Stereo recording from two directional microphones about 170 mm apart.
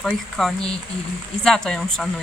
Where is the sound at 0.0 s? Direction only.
5° left (ahead or behind).